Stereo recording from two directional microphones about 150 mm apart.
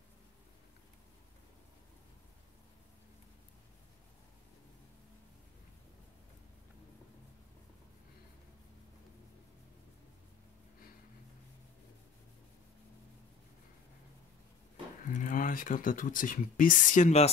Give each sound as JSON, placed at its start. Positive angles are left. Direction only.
{"t": 15.0, "sound": "speech", "side_deg": 65}